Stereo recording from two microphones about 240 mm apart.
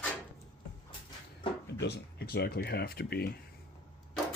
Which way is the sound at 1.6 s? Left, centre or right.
Left.